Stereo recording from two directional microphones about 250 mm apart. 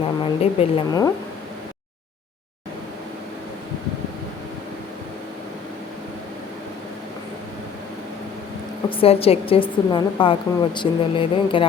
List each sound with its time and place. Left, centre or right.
0.2 s a woman's voice: centre
8.9 s a woman's voice: left